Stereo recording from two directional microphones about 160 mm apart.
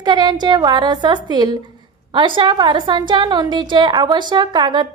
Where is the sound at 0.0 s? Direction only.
25° right (ahead or behind).